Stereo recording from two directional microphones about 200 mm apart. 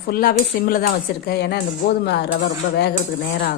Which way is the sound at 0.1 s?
50° left (ahead or behind).